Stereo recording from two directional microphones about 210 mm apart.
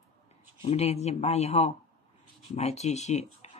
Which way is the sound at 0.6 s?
30° left (ahead or behind).